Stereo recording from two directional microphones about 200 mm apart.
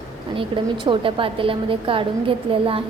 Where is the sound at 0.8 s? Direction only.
25° right (ahead or behind).